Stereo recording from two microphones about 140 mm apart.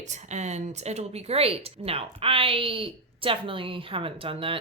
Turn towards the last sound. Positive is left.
turn(degrees=-40)  # may be behind; listen again after turning